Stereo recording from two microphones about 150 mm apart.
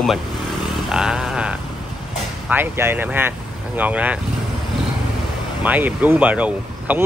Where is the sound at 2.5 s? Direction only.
15° right (ahead or behind).